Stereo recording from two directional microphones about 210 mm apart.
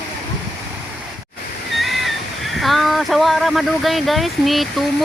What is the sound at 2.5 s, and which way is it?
Speech, centre (ahead or behind).